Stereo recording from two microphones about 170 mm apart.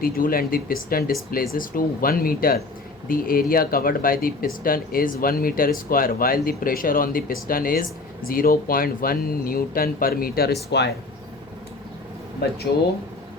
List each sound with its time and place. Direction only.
0.0 s speech: 60° left (ahead or behind)
10.7 s speech: 85° left